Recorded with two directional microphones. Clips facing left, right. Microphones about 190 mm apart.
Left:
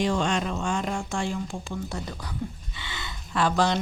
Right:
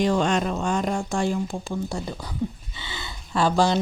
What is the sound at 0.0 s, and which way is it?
Speech, 40° right (ahead or behind).